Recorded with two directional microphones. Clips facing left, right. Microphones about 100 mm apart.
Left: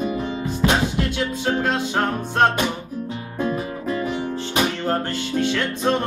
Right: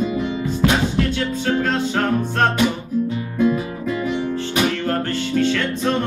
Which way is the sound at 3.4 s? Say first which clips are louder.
Right 5 dB; 40° left (ahead or behind).